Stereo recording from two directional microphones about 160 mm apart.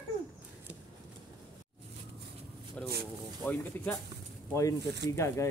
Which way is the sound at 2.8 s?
5° left (ahead or behind).